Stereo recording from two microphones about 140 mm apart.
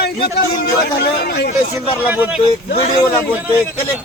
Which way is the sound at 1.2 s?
90° left.